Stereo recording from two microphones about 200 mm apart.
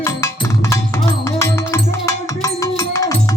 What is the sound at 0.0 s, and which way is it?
Music, 15° left (ahead or behind).